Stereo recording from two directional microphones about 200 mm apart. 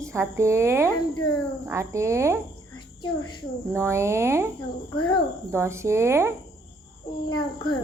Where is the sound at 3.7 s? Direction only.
15° right (ahead or behind).